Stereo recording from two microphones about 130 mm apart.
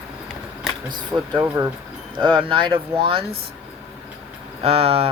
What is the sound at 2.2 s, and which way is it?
Speech, 40° right (ahead or behind).